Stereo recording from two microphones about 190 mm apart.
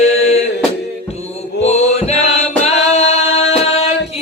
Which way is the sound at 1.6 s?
35° left (ahead or behind).